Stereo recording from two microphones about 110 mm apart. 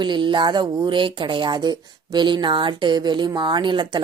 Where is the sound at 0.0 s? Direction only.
45° right (ahead or behind).